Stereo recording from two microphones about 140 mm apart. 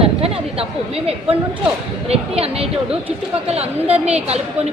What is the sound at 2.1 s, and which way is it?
A woman's voice, 45° right (ahead or behind).